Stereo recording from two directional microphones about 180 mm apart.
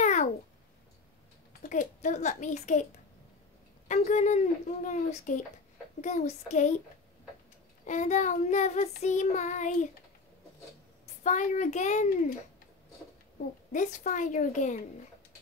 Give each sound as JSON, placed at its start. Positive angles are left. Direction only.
{"t": 0.0, "sound": "cat", "side_deg": 40}
{"t": 1.6, "sound": "a woman's voice", "side_deg": 45}
{"t": 7.8, "sound": "child singing", "side_deg": 40}
{"t": 11.2, "sound": "child singing", "side_deg": 45}
{"t": 13.7, "sound": "child singing", "side_deg": 45}